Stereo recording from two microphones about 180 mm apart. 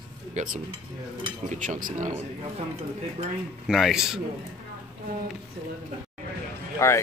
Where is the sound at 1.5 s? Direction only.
45° right (ahead or behind).